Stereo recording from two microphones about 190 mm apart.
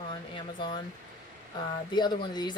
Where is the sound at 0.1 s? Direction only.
25° left (ahead or behind).